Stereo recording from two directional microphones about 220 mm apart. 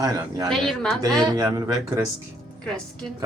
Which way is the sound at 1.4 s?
15° right (ahead or behind).